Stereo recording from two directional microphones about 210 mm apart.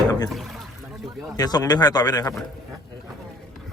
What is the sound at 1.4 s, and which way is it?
Speech, 20° left (ahead or behind).